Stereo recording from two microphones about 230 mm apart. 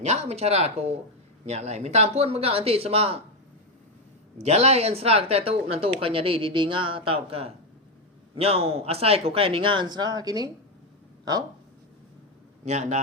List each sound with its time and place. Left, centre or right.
0.0 s speech: right
4.4 s speech: right
12.6 s speech: right